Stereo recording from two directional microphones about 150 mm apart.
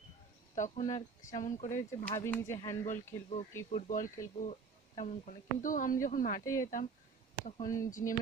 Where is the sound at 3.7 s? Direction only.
55° left (ahead or behind).